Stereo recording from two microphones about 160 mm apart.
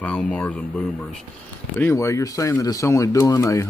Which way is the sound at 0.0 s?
10° left (ahead or behind).